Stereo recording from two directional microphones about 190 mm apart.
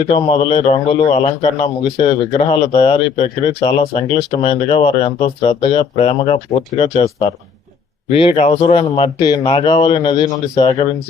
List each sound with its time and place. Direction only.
0.1 s a man's voice: 30° left (ahead or behind)